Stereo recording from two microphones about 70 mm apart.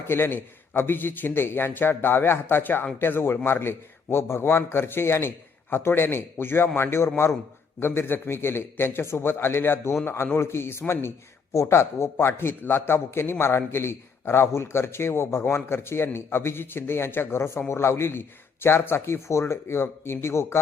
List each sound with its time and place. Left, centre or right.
0.1 s a man's voice: left